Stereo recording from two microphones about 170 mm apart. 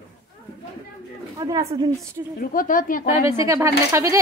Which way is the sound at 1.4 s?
20° right (ahead or behind).